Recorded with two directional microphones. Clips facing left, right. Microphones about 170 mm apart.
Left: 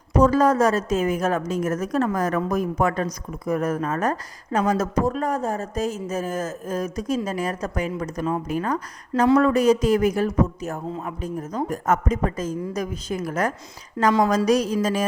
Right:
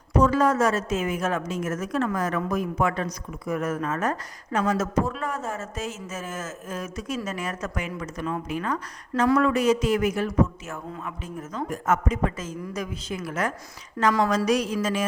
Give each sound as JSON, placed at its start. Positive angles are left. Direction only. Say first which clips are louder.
{"t": 0.2, "sound": "speech", "louder": "left 3 dB", "side_deg": 40}